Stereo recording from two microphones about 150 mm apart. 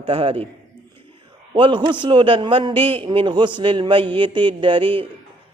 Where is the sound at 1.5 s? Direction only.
35° right (ahead or behind).